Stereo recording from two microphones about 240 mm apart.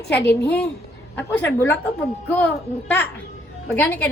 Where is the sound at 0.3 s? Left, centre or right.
Left.